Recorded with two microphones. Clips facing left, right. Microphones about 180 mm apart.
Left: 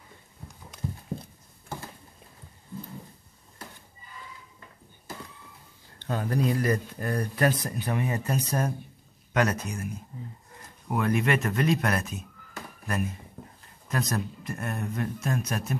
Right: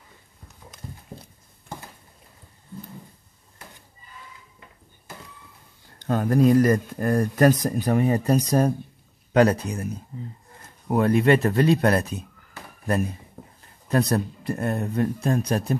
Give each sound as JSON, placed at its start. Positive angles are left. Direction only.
{"t": 5.9, "sound": "speech", "side_deg": -45}
{"t": 10.9, "sound": "speech", "side_deg": -30}
{"t": 13.8, "sound": "speech", "side_deg": -35}